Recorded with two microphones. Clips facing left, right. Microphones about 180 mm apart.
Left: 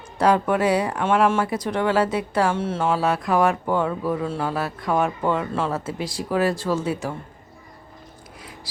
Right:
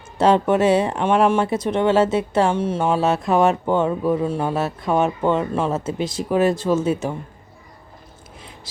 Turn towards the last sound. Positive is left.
turn(degrees=-20)  # may be behind; listen again after turning